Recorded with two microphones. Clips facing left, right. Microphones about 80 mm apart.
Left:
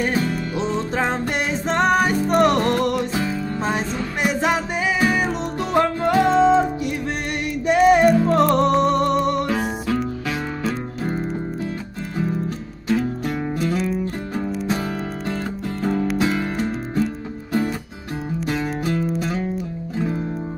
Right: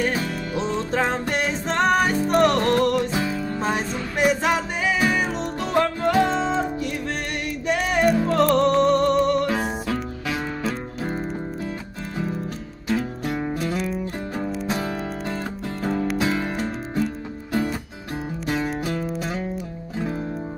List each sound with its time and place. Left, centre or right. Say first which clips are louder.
0.1 s music: left 3 dB; centre
2.4 s music: right 1 dB; centre
3.3 s music: left 1 dB; centre
8.0 s music: left 4 dB; centre
8.5 s music: even; centre
9.5 s music: left 2 dB; centre
12.8 s music: left 3 dB; centre
18.4 s music: left 1 dB; centre